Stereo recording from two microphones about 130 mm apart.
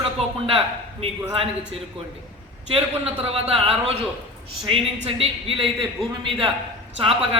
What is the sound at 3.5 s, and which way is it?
Speech, 50° right (ahead or behind).